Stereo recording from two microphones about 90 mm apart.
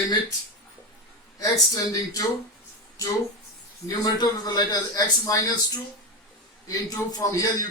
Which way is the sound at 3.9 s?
45° left (ahead or behind).